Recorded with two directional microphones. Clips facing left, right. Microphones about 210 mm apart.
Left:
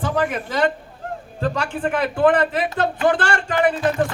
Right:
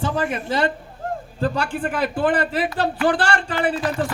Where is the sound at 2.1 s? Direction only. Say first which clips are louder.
Left 5 dB; 30° right (ahead or behind).